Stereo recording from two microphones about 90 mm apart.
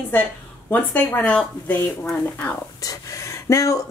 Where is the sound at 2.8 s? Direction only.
40° left (ahead or behind).